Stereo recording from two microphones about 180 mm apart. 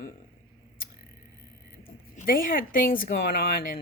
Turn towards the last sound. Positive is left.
turn(degrees=55)  # may be behind; listen again after turning